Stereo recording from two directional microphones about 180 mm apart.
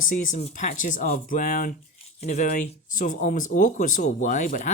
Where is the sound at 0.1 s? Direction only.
50° left (ahead or behind).